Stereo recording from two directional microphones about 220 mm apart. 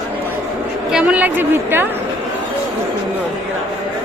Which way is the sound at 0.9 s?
5° right (ahead or behind).